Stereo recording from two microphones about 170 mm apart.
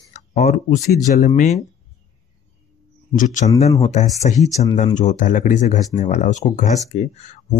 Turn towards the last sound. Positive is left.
turn(degrees=45)  # may be behind; listen again after turning